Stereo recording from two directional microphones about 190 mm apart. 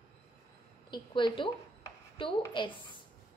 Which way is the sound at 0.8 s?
25° left (ahead or behind).